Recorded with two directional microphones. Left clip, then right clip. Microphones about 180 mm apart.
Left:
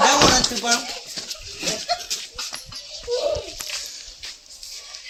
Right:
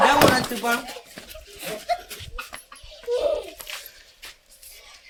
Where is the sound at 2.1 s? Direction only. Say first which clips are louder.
Left 10 dB; 65° right (ahead or behind).